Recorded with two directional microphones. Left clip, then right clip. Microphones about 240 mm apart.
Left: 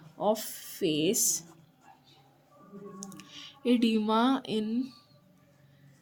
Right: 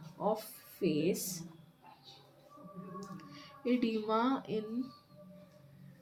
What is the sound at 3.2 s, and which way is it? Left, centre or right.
Speech, left.